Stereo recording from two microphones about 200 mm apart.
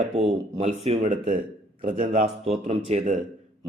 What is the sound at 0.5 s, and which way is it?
A man's voice, 30° right (ahead or behind).